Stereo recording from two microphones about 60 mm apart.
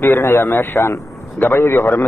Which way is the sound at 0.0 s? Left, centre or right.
Left.